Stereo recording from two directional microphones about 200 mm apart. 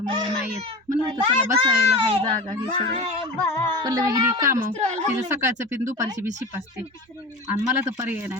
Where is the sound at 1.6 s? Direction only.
25° right (ahead or behind).